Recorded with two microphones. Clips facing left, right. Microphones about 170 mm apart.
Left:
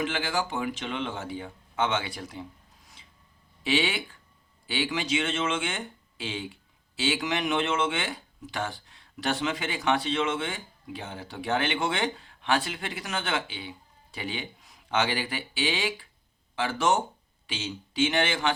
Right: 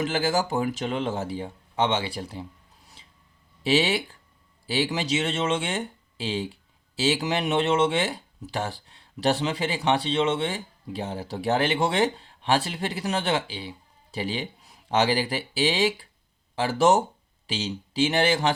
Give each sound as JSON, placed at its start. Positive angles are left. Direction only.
{"t": 0.0, "sound": "speech", "side_deg": -40}
{"t": 3.6, "sound": "speech", "side_deg": -35}